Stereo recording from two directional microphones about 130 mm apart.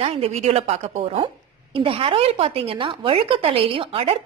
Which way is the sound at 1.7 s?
45° right (ahead or behind).